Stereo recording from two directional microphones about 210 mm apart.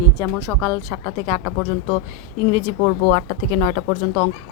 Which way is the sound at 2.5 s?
25° left (ahead or behind).